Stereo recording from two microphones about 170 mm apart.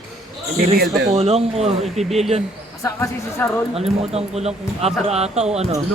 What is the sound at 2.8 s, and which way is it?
Speech, 15° left (ahead or behind).